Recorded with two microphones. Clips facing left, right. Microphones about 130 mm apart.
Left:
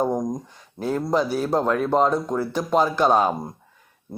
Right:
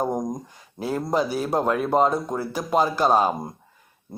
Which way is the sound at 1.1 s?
10° right (ahead or behind).